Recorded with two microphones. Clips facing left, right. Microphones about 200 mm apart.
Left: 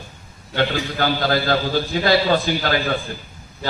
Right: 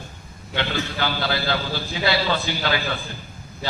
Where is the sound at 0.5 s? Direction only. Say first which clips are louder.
Left 4 dB; 45° left (ahead or behind).